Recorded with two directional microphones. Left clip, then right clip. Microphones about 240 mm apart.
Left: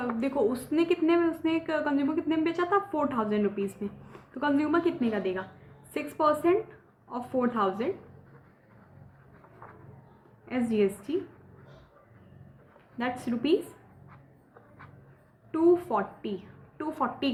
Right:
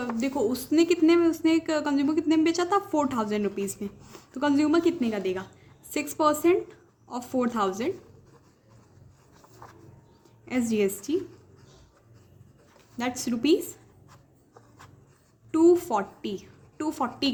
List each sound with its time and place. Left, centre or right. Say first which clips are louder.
0.2 s a woman's voice: right 1 dB; right
10.4 s a woman's voice: right 1 dB; right
13.0 s a woman's voice: right 2 dB; right
15.5 s a woman's voice: right 3 dB; right